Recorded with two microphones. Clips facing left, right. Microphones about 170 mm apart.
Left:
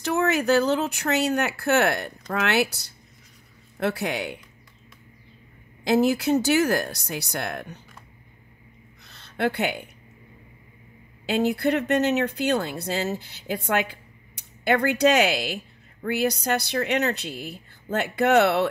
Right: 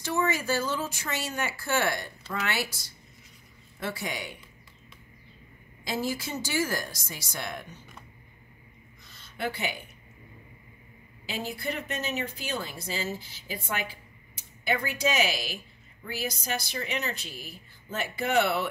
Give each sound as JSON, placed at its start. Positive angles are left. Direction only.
{"t": 0.0, "sound": "speech", "side_deg": 65}
{"t": 3.8, "sound": "speech", "side_deg": 65}
{"t": 5.9, "sound": "speech", "side_deg": 65}
{"t": 9.0, "sound": "a sound", "side_deg": 65}
{"t": 11.2, "sound": "speech", "side_deg": 65}